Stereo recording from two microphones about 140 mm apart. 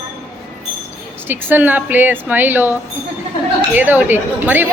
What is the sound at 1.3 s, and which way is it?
A woman's voice, 15° right (ahead or behind).